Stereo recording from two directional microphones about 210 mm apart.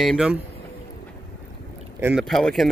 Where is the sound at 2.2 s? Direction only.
Centre (ahead or behind).